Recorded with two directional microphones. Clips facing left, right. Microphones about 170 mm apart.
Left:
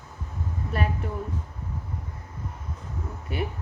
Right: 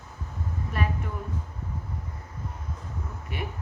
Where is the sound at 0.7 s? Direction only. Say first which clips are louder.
Left 2 dB; 35° left (ahead or behind).